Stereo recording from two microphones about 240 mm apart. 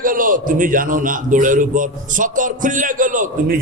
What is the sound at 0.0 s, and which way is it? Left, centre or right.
A man's voice, right.